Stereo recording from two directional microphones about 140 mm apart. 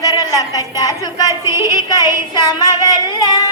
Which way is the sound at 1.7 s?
30° left (ahead or behind).